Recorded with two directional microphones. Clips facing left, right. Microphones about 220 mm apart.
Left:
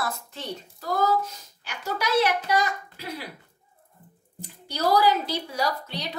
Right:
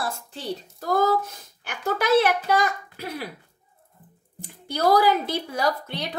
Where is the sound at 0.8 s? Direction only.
55° right (ahead or behind).